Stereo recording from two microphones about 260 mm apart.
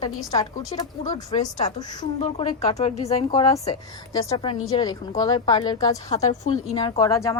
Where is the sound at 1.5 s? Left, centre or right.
Left.